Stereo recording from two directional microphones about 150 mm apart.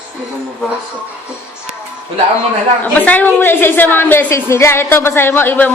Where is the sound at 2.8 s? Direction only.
10° left (ahead or behind).